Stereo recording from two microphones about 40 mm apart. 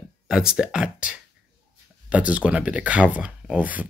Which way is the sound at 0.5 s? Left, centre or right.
Centre.